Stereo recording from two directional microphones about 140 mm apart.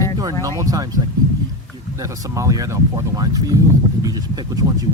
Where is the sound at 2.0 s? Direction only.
25° right (ahead or behind).